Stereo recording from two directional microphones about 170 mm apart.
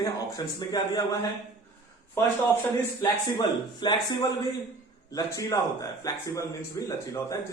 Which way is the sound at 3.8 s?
25° left (ahead or behind).